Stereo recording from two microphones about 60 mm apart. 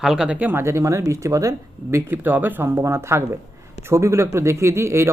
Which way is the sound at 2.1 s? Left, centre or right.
Right.